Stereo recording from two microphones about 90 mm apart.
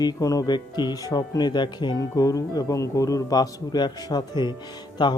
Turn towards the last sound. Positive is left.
turn(degrees=55)  # may be behind; listen again after turning